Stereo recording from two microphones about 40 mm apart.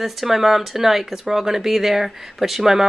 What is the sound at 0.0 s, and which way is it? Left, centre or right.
Speech, centre.